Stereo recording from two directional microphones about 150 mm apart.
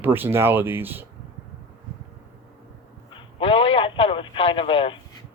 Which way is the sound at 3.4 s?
35° left (ahead or behind).